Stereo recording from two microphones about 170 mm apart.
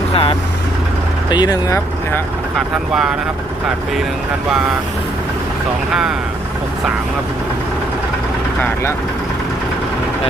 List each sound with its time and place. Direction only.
0.1 s speech: 35° left (ahead or behind)
1.3 s speech: 25° left (ahead or behind)
2.6 s speech: 5° right (ahead or behind)
5.9 s speech: 5° right (ahead or behind)
8.6 s speech: 15° left (ahead or behind)